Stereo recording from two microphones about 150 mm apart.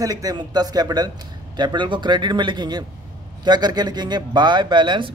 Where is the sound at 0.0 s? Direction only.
25° right (ahead or behind).